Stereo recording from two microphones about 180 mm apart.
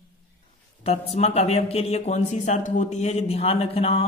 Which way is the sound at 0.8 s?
35° left (ahead or behind).